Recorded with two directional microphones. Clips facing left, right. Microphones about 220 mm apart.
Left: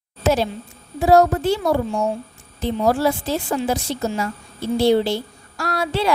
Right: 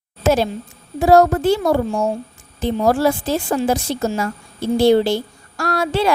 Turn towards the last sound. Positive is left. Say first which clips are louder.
# right 3 dB
turn(degrees=-50)  # may be behind; listen again after turning